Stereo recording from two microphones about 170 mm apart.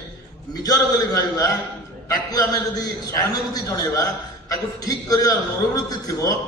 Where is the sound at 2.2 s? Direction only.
20° left (ahead or behind).